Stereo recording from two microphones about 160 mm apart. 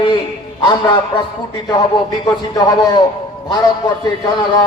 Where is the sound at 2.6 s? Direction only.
25° left (ahead or behind).